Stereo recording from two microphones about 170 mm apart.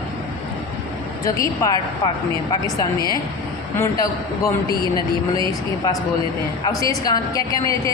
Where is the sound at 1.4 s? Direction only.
20° left (ahead or behind).